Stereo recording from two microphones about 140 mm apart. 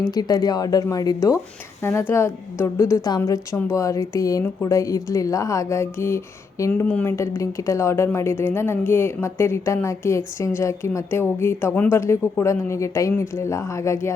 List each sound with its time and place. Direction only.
0.1 s a woman's voice: 30° left (ahead or behind)